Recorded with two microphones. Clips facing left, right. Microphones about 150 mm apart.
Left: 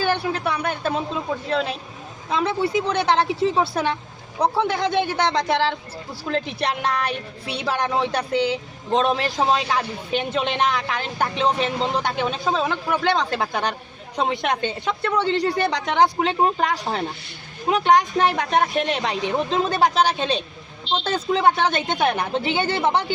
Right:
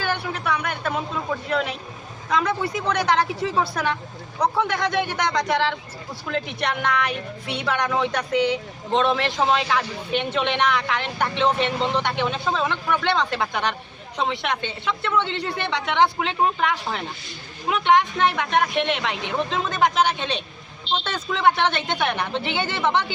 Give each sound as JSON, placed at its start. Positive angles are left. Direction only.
{"t": 0.0, "sound": "speech", "side_deg": 30}